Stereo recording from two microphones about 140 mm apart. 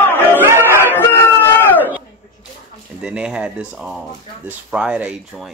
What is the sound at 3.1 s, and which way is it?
Speech, 5° right (ahead or behind).